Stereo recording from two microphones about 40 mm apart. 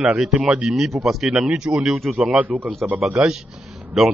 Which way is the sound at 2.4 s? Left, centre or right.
Right.